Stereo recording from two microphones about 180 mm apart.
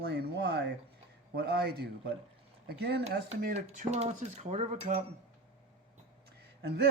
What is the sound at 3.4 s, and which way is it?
Dishes, 40° right (ahead or behind).